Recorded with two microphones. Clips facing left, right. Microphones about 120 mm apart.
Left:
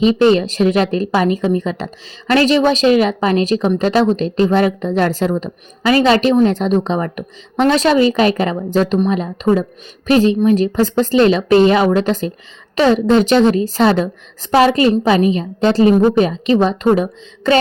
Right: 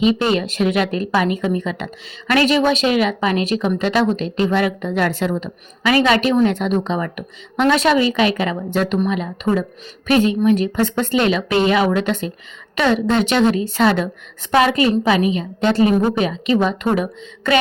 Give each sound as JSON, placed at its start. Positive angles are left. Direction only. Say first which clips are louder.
{"t": 0.0, "sound": "a woman's voice", "louder": "left 5 dB", "side_deg": 35}